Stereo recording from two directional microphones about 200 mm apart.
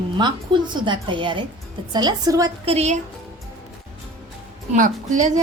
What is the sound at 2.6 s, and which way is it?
Speech, 30° right (ahead or behind).